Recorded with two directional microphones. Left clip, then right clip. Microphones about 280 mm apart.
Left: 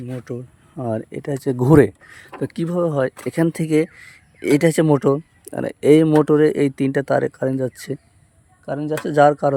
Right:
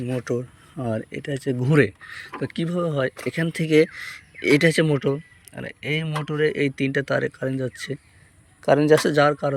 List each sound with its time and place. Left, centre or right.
0.0 s speech: centre
8.6 s speech: right
9.0 s speech: centre